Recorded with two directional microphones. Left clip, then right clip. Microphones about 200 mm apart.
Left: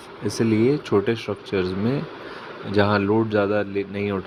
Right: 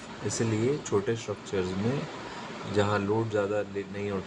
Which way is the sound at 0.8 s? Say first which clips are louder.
Left 7 dB; 35° left (ahead or behind).